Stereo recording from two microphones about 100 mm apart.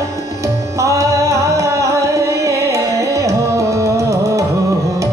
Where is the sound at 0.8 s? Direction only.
30° right (ahead or behind).